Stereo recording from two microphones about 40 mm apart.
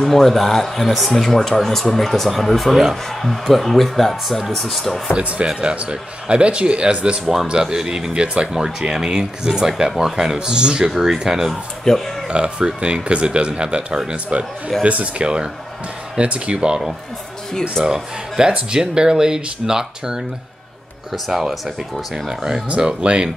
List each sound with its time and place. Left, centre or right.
0.0 s speech: centre
5.6 s speech: right
7.4 s speech: centre
11.8 s speech: centre
12.3 s speech: right
14.9 s speech: right
15.2 s speech: right
17.5 s speech: centre
18.7 s speech: centre
22.8 s speech: right